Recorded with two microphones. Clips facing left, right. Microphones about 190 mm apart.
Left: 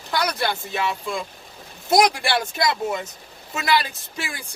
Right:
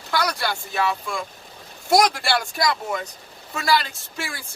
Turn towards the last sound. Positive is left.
turn(degrees=20)  # may be behind; listen again after turning